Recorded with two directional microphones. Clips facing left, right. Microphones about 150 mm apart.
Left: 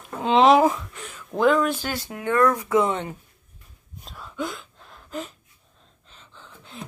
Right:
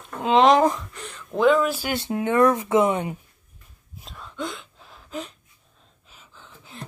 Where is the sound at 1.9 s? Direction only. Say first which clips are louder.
Right 3 dB; 25° right (ahead or behind).